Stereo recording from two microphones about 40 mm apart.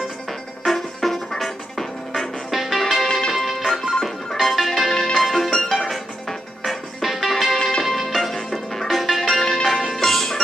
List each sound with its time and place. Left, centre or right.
0.7 s music: centre
2.5 s music: centre
2.8 s music: centre
4.9 s music: centre
5.2 s music: centre
9.4 s music: centre